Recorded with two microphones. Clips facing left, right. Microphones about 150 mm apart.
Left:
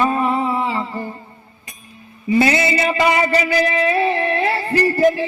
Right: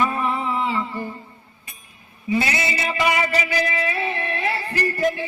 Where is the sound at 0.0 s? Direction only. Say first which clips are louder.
Left 5 dB; 35° left (ahead or behind).